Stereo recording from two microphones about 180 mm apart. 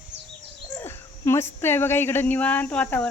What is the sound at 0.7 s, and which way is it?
Speech, 15° left (ahead or behind).